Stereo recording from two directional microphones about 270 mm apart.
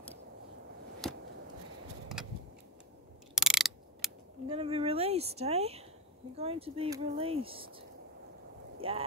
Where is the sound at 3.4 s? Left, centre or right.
Centre.